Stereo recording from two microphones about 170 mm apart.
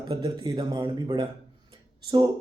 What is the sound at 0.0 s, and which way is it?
Speech, 25° right (ahead or behind).